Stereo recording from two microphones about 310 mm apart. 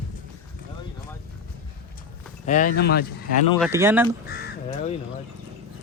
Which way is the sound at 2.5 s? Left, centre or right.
Left.